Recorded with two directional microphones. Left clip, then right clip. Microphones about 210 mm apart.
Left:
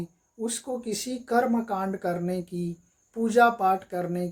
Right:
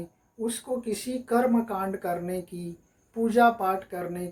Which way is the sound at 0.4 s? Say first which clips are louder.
Right 1 dB; 50° left (ahead or behind).